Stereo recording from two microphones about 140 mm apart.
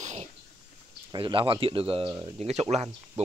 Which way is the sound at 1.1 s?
35° right (ahead or behind).